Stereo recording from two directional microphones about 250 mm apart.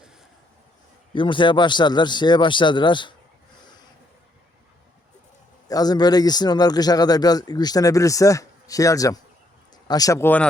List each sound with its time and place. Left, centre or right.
1.1 s a man's voice: centre
5.6 s a man's voice: centre